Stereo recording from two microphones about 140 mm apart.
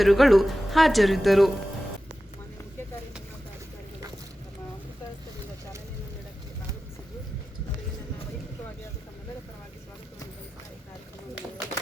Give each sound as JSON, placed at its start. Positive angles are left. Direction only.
{"t": 0.0, "sound": "speech", "side_deg": 0}